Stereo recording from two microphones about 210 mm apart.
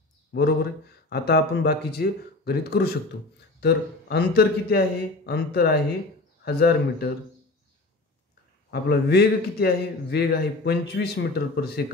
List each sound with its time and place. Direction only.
0.3 s a man's voice: 50° left (ahead or behind)
8.6 s a man's voice: 50° left (ahead or behind)